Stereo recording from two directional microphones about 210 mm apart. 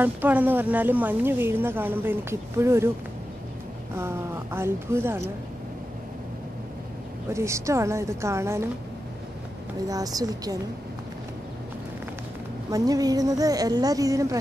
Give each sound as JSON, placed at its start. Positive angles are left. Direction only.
{"t": 0.0, "sound": "a woman's voice", "side_deg": -10}
{"t": 3.9, "sound": "a woman's voice", "side_deg": -10}
{"t": 7.3, "sound": "a woman's voice", "side_deg": -15}
{"t": 9.8, "sound": "a woman's voice", "side_deg": -15}
{"t": 12.7, "sound": "a woman's voice", "side_deg": -15}